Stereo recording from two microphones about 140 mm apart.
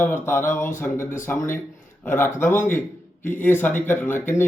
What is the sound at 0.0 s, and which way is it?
A man's voice, 15° left (ahead or behind).